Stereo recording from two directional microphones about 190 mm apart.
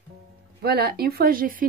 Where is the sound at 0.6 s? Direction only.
55° right (ahead or behind).